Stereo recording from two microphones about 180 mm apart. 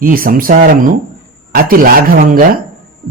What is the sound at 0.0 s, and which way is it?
A man's voice, 55° right (ahead or behind).